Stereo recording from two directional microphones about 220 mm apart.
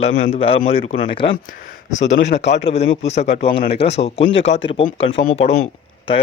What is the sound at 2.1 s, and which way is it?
Speech, 55° left (ahead or behind).